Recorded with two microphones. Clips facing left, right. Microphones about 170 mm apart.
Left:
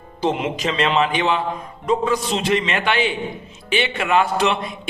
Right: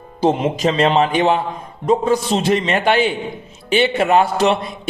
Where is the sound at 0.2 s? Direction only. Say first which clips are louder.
Right 5 dB; 40° right (ahead or behind).